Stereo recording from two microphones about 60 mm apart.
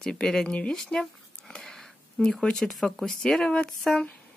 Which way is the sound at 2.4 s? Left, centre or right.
Centre.